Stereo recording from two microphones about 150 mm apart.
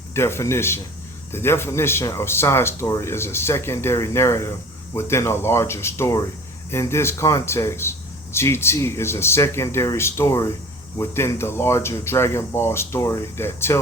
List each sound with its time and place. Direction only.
0.1 s speech: 15° left (ahead or behind)